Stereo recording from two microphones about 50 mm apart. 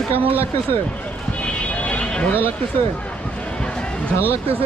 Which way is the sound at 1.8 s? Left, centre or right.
Left.